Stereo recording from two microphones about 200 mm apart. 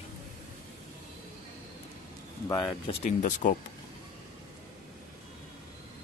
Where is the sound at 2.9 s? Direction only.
40° left (ahead or behind).